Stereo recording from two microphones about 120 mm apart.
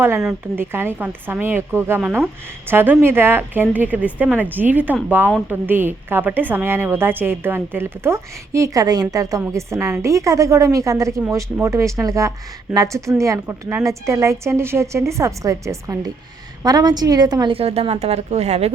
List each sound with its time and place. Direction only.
0.5 s a woman's voice: 20° right (ahead or behind); by 17.5 s 35° right (ahead or behind)
17.5 s speech: 55° right (ahead or behind)